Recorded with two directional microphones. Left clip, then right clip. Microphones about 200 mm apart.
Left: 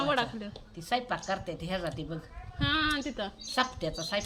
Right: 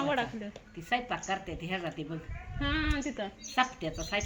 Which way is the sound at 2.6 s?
5° left (ahead or behind).